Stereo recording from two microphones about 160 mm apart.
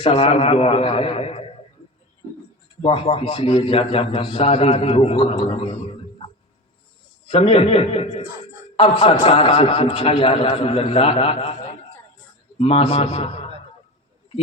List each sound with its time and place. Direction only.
0.0 s a man's voice: 35° left (ahead or behind)
2.8 s a man's voice: 35° left (ahead or behind)
7.3 s a man's voice: 35° left (ahead or behind)